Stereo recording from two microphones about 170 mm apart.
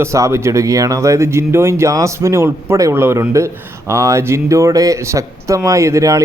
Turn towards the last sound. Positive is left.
turn(degrees=-15)  # may be behind; listen again after turning